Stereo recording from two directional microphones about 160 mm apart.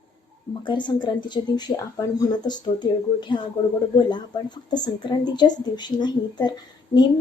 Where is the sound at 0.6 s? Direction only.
30° left (ahead or behind).